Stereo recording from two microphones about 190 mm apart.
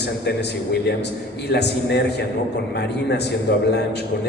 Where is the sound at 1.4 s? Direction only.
60° left (ahead or behind).